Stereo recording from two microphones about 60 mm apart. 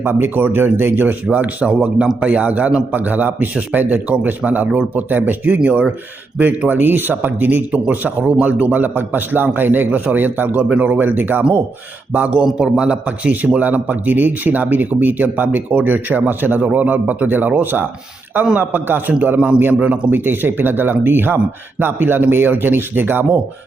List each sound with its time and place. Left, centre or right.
0.0 s a man's voice: right
12.1 s a man's voice: right